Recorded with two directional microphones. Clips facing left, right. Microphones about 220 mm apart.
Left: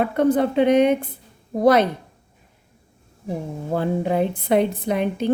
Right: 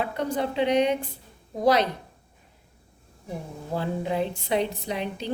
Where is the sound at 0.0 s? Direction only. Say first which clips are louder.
Left 9 dB; 55° left (ahead or behind).